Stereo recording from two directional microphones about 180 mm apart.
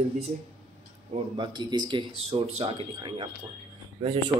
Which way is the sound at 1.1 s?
25° right (ahead or behind).